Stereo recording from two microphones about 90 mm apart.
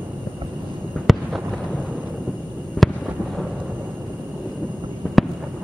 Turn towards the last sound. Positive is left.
turn(degrees=5)  # may be behind; listen again after turning